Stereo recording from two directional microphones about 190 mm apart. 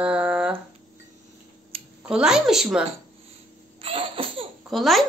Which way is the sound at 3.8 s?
30° right (ahead or behind).